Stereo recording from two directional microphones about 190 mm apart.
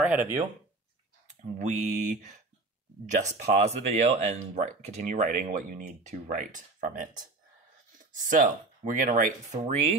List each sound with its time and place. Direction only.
0.0 s speech: 10° right (ahead or behind)
1.6 s speech: 35° right (ahead or behind)